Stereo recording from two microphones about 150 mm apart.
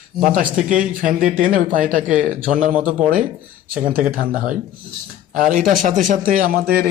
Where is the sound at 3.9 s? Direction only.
75° right (ahead or behind).